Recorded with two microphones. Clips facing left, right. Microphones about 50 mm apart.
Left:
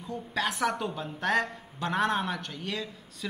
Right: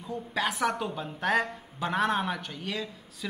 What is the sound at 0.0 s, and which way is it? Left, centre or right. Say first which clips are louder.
A woman's voice: right 1 dB; centre.